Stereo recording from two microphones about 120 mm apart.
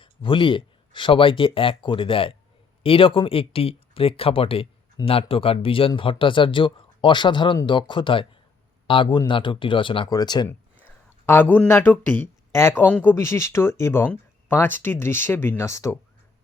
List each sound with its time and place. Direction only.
0.0 s speech: 45° left (ahead or behind)
10.8 s a sound: 15° left (ahead or behind)
12.5 s speech: 20° left (ahead or behind)